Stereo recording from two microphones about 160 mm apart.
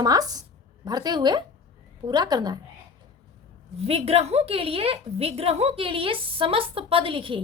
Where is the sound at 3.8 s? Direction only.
40° right (ahead or behind).